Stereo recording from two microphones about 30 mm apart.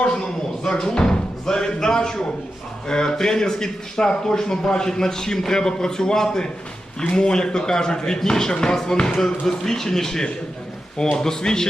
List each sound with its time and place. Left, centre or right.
0.6 s speech: centre
0.9 s speech: left
1.5 s a sound: left
2.8 s a man's voice: left